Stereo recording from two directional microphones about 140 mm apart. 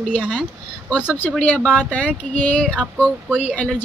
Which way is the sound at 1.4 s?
10° left (ahead or behind).